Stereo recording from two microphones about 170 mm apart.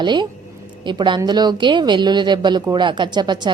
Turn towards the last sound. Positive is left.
turn(degrees=-25)  # may be behind; listen again after turning